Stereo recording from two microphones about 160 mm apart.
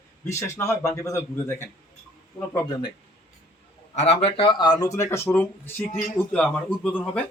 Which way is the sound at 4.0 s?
40° left (ahead or behind).